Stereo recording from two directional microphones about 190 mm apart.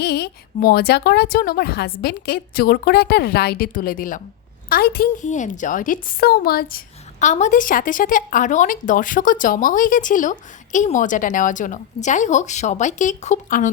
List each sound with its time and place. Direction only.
0.0 s a woman's voice: 60° left (ahead or behind)
5.2 s a woman's voice: 40° left (ahead or behind)